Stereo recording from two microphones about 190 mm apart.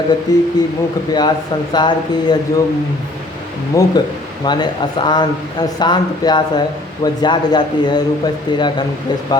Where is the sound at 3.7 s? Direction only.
15° left (ahead or behind).